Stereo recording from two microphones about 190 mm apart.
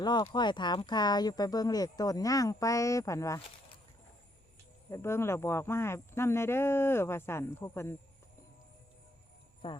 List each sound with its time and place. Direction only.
0.0 s speech: 20° left (ahead or behind)
4.9 s speech: 15° left (ahead or behind)